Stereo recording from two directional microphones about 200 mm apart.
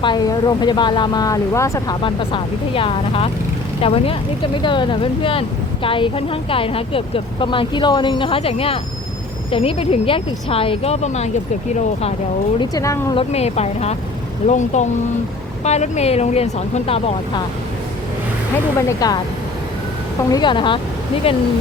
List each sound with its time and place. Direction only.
0.0 s speech: 20° left (ahead or behind)
12.5 s speech: 15° left (ahead or behind)
13.1 s speech: 30° left (ahead or behind)
18.8 s speech: 15° left (ahead or behind)
20.3 s speech: 25° left (ahead or behind)